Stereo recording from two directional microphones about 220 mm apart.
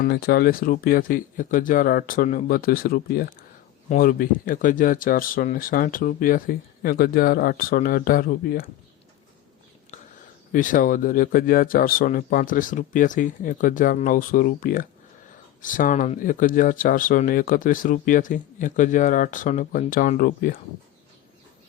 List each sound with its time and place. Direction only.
0.0 s speech: 45° left (ahead or behind)
10.5 s speech: 35° left (ahead or behind)